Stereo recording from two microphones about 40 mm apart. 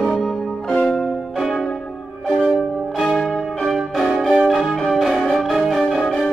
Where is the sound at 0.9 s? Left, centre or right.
Centre.